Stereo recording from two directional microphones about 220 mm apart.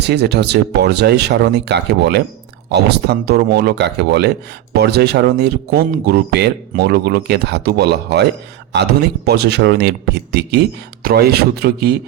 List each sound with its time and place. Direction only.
0.0 s speech: 50° right (ahead or behind)